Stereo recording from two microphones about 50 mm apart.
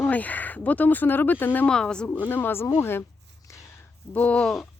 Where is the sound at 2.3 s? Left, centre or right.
Left.